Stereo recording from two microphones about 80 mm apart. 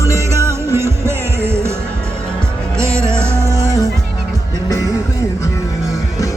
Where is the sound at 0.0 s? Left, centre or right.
Right.